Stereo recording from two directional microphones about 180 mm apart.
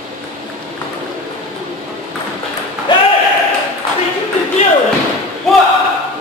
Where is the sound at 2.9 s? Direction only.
25° left (ahead or behind).